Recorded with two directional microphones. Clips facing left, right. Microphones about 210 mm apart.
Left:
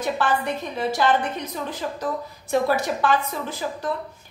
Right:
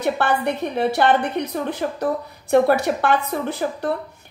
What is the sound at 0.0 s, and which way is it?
A woman's voice, 60° right (ahead or behind).